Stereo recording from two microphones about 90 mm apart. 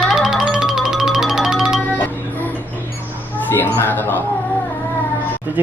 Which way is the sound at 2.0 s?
20° left (ahead or behind).